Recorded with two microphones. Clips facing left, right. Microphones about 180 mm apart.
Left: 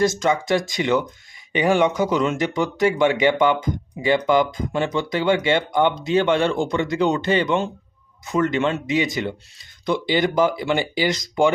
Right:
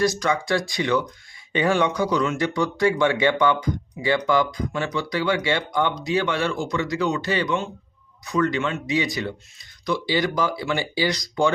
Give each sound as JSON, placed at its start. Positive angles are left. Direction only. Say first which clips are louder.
{"t": 0.0, "sound": "speech", "louder": "left 2 dB", "side_deg": 20}